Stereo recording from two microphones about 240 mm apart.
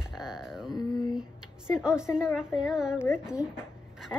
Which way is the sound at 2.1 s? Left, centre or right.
Centre.